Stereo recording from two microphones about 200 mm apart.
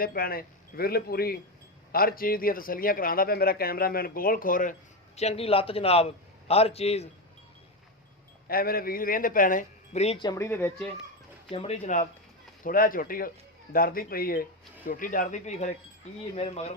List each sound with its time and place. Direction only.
0.0 s speech: 50° left (ahead or behind); by 7.1 s 30° left (ahead or behind)
8.4 s speech: 50° left (ahead or behind); by 10.8 s 10° left (ahead or behind)
11.5 s speech: 30° left (ahead or behind)